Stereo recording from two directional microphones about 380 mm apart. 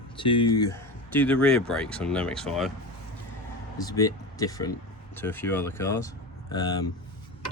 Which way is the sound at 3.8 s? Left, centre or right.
Centre.